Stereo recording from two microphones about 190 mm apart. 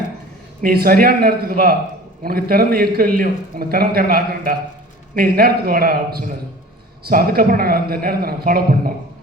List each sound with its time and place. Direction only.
0.6 s a man's voice: 50° right (ahead or behind)